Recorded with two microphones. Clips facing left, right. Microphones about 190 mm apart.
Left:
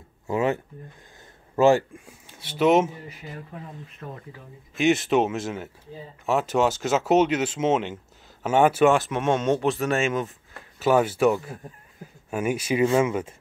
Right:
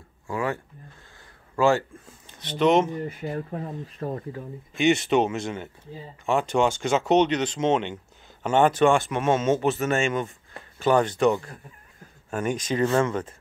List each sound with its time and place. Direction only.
0.3 s speech: 20° left (ahead or behind)
3.1 s speech: 50° right (ahead or behind)
4.7 s speech: centre (ahead or behind)